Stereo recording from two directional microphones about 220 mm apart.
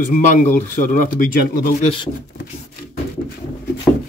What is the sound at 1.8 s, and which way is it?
Speech, 25° left (ahead or behind).